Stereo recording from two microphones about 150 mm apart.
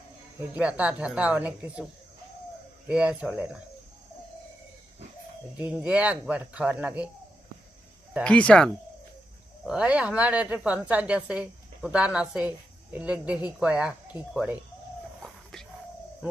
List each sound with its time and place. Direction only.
0.3 s a woman's voice: 10° right (ahead or behind)
2.9 s a woman's voice: 10° right (ahead or behind)
5.5 s a woman's voice: 10° right (ahead or behind)
8.2 s speech: 5° left (ahead or behind)
9.6 s a woman's voice: 5° right (ahead or behind)
15.5 s a sound: centre (ahead or behind)